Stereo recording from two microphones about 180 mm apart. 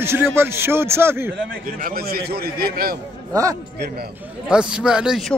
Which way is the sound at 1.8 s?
55° right (ahead or behind).